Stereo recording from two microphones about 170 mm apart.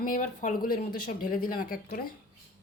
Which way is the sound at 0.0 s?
50° left (ahead or behind).